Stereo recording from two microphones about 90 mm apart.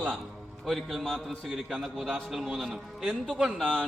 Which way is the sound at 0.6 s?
Centre (ahead or behind).